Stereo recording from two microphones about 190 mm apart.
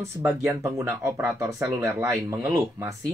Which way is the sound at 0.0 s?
10° right (ahead or behind).